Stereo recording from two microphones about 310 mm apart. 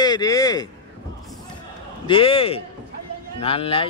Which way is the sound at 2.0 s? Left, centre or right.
Centre.